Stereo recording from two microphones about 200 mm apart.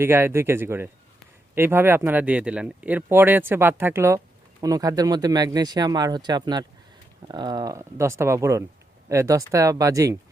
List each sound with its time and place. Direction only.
0.0 s speech: 10° right (ahead or behind)